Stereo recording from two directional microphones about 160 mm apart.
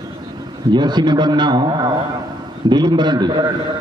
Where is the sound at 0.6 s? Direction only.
30° right (ahead or behind).